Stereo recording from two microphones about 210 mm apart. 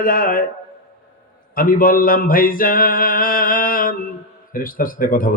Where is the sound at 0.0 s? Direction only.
40° left (ahead or behind).